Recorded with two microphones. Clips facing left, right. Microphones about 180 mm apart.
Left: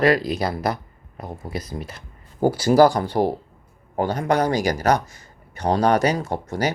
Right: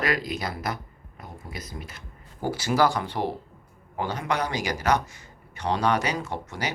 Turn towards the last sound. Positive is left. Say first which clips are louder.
# left 7 dB
turn(degrees=40)  # may be behind; listen again after turning